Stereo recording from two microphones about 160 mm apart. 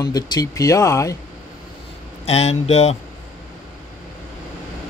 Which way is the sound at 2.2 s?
40° left (ahead or behind).